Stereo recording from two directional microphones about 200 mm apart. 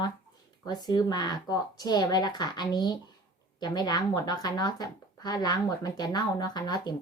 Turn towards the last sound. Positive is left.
turn(degrees=20)  # may be behind; listen again after turning